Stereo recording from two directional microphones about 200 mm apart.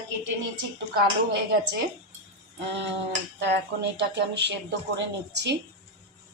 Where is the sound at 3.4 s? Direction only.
60° right (ahead or behind).